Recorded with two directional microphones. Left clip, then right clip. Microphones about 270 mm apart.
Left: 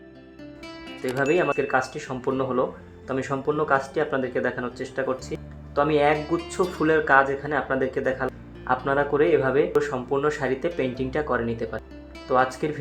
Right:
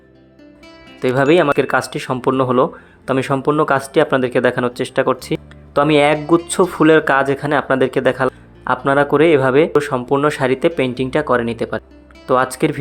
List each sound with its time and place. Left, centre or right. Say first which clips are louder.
1.1 s speech: right 9 dB; right